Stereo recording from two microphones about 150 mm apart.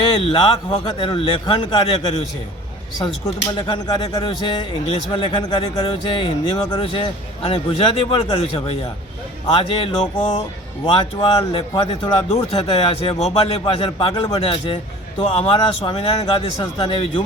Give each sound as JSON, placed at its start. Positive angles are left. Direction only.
{"t": 0.0, "sound": "a man's voice", "side_deg": 35}
{"t": 3.6, "sound": "a man's voice", "side_deg": 30}